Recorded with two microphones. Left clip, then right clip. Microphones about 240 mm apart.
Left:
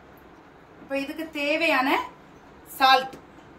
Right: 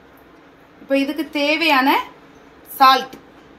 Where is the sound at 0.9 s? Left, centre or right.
Right.